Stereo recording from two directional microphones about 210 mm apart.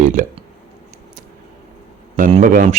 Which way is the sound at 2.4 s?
40° right (ahead or behind).